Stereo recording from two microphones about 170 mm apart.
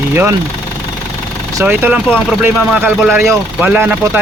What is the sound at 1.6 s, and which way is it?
Speech, 10° right (ahead or behind).